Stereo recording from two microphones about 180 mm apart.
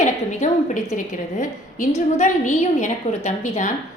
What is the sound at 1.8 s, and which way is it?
A woman's voice, 40° left (ahead or behind).